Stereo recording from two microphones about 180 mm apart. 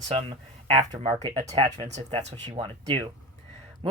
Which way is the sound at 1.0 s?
35° right (ahead or behind).